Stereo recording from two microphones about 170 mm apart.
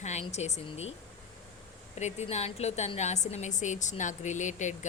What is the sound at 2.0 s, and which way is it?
A woman's voice, 40° left (ahead or behind).